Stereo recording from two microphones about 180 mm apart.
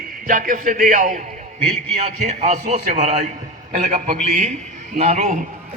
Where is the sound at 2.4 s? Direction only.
40° right (ahead or behind).